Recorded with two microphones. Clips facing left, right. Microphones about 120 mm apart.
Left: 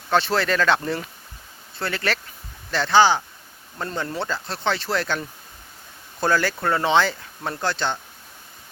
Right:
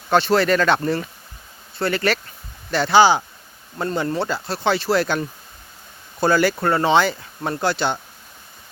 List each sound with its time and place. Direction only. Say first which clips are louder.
0.1 s speech: right 4 dB; centre (ahead or behind)